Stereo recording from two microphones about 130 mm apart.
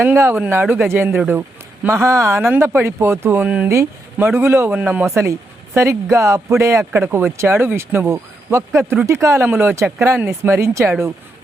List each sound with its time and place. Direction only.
0.0 s speech: 15° right (ahead or behind)